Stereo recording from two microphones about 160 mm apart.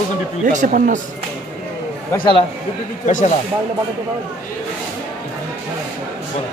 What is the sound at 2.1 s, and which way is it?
Speech, 30° left (ahead or behind).